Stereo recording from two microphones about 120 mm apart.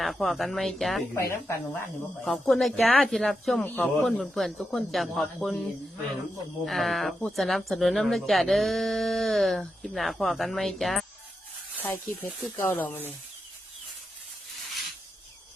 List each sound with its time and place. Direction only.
0.0 s speech: centre (ahead or behind)
1.1 s speech: 20° left (ahead or behind)
2.2 s speech: centre (ahead or behind)
6.7 s speech: centre (ahead or behind)
11.8 s speech: 20° left (ahead or behind)